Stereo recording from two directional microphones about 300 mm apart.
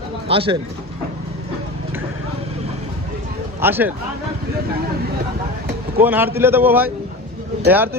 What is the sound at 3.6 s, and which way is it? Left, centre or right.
Speech, centre.